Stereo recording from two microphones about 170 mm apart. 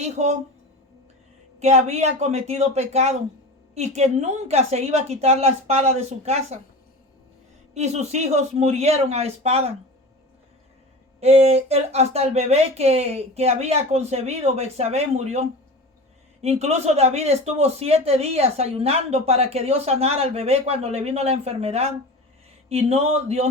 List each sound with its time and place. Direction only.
0.0 s speech: 40° right (ahead or behind)
1.5 s speech: 40° right (ahead or behind)
7.7 s speech: 40° right (ahead or behind)
11.2 s speech: 40° right (ahead or behind)